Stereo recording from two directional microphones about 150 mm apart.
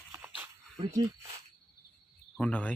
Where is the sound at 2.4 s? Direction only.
10° left (ahead or behind).